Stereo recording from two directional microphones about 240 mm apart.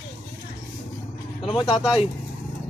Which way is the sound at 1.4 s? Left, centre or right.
Left.